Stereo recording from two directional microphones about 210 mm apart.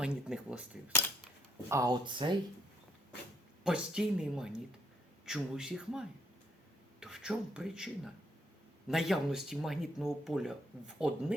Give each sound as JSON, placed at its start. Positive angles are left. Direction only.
{"t": 0.0, "sound": "speech", "side_deg": -5}
{"t": 1.7, "sound": "speech", "side_deg": -20}
{"t": 3.6, "sound": "speech", "side_deg": -5}